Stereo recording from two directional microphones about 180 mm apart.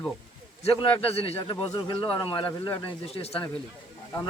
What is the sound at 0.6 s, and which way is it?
Speech, 35° left (ahead or behind).